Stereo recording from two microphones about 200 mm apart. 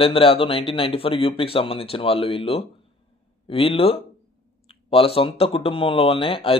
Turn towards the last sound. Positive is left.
turn(degrees=25)  # may be behind; listen again after turning